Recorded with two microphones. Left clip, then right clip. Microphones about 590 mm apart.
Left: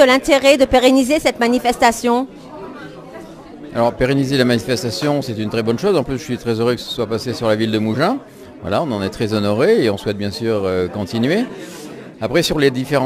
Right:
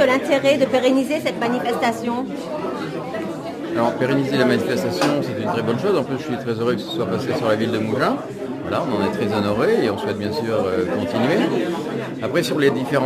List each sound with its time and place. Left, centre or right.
0.0 s a woman's voice: left
3.7 s speech: left